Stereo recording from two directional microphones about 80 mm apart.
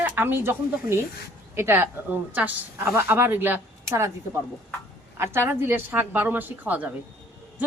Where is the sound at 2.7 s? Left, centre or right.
Right.